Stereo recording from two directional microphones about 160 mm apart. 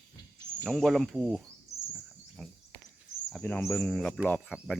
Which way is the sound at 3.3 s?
10° left (ahead or behind).